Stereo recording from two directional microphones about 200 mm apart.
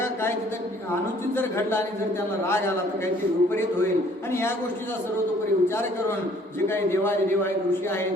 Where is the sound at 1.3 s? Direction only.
10° left (ahead or behind).